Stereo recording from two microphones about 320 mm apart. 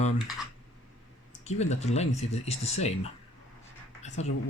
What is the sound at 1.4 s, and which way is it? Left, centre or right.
Speech, left.